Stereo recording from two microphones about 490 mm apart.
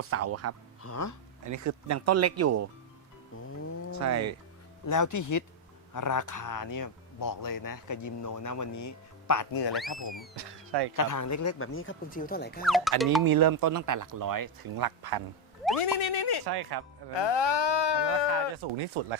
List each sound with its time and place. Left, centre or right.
0.0 s speech: right
0.8 s speech: left
1.5 s speech: right
3.9 s speech: right
4.9 s speech: left
9.7 s speech: centre
10.3 s speech: right
10.9 s speech: left; by 12.6 s centre
12.6 s speech: centre
13.2 s speech: right
15.8 s a sound: left
16.5 s speech: right
17.2 s speech: left
18.5 s speech: right